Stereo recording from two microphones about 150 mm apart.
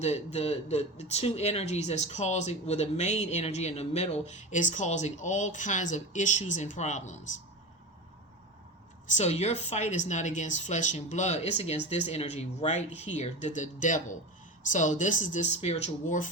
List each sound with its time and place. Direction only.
0.0 s speech: 45° left (ahead or behind)
9.0 s speech: 50° left (ahead or behind)